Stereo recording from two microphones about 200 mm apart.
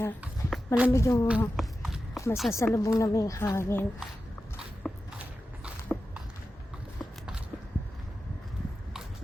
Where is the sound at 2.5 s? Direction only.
15° left (ahead or behind).